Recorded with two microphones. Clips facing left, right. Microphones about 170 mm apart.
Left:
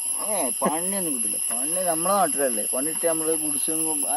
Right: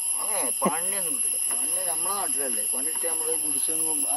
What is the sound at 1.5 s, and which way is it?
Speech, 65° left (ahead or behind).